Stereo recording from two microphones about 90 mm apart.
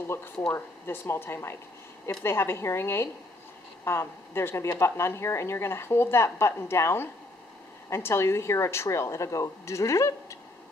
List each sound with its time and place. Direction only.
0.0 s a woman's voice: 25° left (ahead or behind)